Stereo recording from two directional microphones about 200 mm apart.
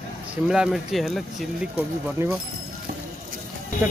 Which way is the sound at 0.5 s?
Centre (ahead or behind).